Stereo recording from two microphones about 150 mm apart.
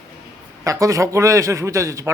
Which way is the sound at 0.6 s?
20° right (ahead or behind).